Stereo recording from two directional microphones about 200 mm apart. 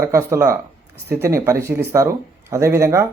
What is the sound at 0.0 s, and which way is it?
Speech, 15° right (ahead or behind).